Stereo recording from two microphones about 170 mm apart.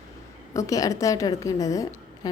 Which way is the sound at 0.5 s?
20° left (ahead or behind).